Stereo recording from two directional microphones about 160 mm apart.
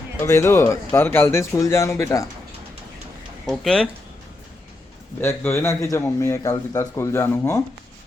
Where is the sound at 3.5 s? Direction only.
5° left (ahead or behind).